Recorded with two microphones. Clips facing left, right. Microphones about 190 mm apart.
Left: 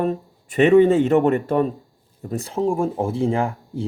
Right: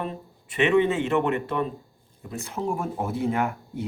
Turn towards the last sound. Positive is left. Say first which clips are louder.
# left 4 dB
turn(degrees=30)  # may be behind; listen again after turning